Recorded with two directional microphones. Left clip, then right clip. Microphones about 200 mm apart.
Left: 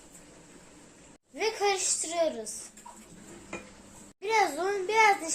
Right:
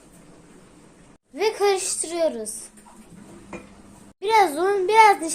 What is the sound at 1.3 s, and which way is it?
Speech, 45° right (ahead or behind).